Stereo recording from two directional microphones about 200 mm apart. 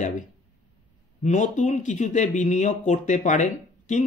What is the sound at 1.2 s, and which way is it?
Speech, 35° left (ahead or behind).